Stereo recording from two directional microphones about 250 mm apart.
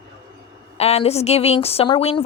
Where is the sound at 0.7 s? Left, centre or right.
Left.